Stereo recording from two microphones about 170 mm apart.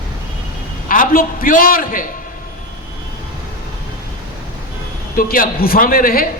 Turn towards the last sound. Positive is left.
turn(degrees=60)  # may be behind; listen again after turning